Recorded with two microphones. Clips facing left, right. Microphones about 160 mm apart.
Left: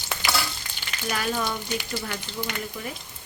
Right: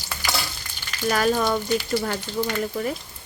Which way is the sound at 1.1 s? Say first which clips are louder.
Right 6 dB; 55° right (ahead or behind).